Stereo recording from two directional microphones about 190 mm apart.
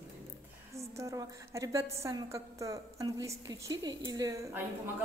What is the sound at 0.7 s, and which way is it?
A woman's voice, 15° right (ahead or behind).